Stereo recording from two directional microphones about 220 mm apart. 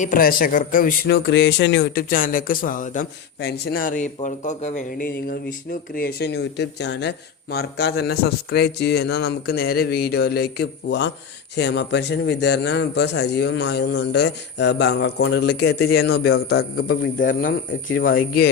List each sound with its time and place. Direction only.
0.0 s speech: 40° left (ahead or behind)